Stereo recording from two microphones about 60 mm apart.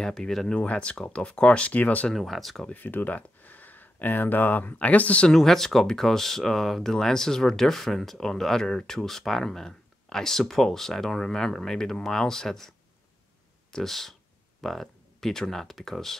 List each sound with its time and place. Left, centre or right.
0.0 s speech: centre
0.6 s speech: centre
2.0 s speech: centre
2.7 s speech: left
5.3 s speech: centre